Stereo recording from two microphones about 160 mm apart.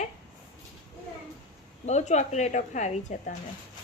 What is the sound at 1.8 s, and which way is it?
A woman's voice, 45° left (ahead or behind).